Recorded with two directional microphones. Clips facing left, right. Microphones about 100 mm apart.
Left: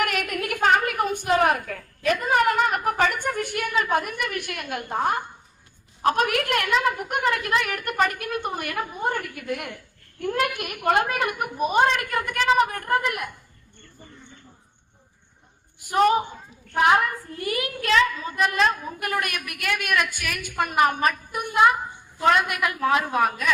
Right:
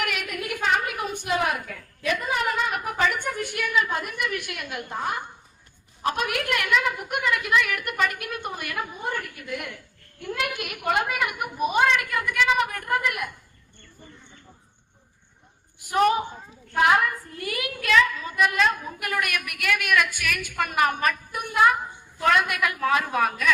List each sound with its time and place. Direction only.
0.0 s a sound: 45° left (ahead or behind)
6.0 s a woman's voice: 50° left (ahead or behind); by 13.1 s 35° left (ahead or behind)
16.8 s a woman's voice: 30° left (ahead or behind)